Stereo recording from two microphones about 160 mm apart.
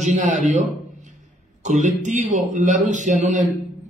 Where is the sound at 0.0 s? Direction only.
45° right (ahead or behind).